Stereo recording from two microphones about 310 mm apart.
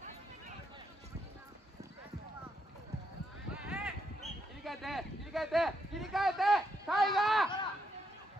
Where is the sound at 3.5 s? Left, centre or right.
Centre.